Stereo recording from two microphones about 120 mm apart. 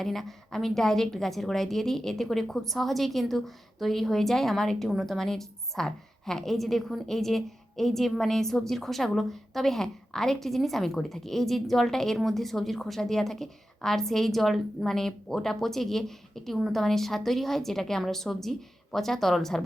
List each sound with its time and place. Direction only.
0.0 s a woman's voice: centre (ahead or behind)